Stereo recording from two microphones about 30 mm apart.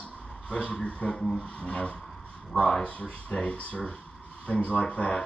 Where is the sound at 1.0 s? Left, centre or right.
Left.